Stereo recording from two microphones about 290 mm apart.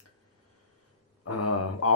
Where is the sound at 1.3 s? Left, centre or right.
Left.